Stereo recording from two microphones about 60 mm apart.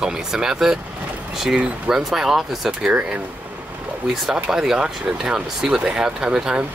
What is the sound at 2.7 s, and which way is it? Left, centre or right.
Speech, centre.